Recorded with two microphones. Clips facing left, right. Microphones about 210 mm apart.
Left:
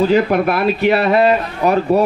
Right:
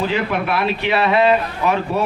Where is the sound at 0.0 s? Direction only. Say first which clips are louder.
Left 7 dB; 45° left (ahead or behind).